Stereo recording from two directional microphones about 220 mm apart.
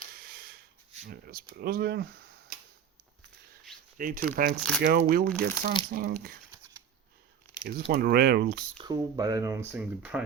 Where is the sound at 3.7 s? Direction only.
Centre (ahead or behind).